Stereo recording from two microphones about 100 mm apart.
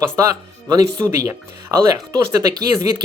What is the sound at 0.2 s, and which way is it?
Speech, 35° right (ahead or behind).